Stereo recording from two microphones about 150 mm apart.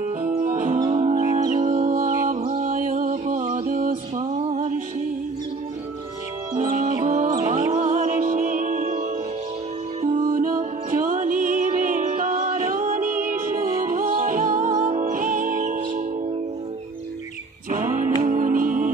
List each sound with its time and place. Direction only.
0.0 s music: 55° right (ahead or behind)
0.8 s music: 45° right (ahead or behind); by 2.3 s 65° right (ahead or behind)
2.3 s music: 40° right (ahead or behind)
2.6 s music: 65° right (ahead or behind)
6.5 s music: 55° right (ahead or behind)
10.0 s music: 60° right (ahead or behind)
17.6 s music: 65° right (ahead or behind)